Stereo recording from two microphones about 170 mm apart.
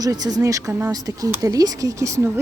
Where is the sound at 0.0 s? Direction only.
20° right (ahead or behind).